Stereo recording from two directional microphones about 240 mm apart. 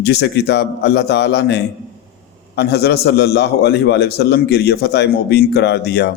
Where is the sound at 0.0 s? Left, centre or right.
Left.